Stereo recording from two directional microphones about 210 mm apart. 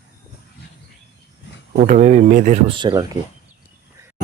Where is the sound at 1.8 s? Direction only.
35° right (ahead or behind).